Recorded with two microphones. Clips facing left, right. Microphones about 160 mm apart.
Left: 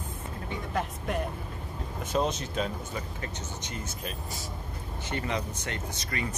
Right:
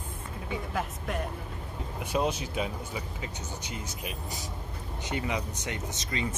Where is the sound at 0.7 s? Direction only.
Centre (ahead or behind).